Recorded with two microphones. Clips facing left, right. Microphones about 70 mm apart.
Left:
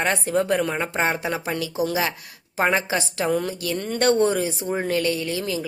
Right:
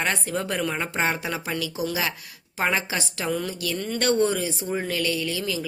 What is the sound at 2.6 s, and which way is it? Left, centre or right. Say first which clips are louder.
Speech: left 4 dB; left.